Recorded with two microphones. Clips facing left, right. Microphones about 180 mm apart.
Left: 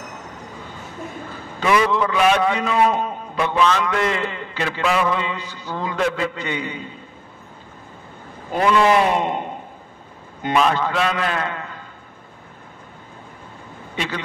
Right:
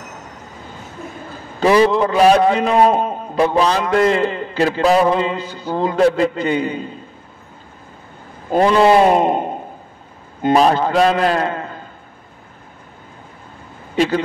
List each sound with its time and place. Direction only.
1.6 s a man's voice: 35° right (ahead or behind)
8.5 s a man's voice: 30° right (ahead or behind)
10.5 s a man's voice: 40° right (ahead or behind)
13.9 s speech: 40° right (ahead or behind)